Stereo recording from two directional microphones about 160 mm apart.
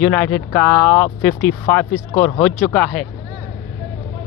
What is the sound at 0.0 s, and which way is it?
Speech, 5° left (ahead or behind).